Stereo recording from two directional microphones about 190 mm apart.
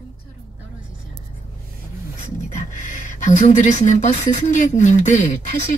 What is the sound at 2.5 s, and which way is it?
Speech, 40° left (ahead or behind).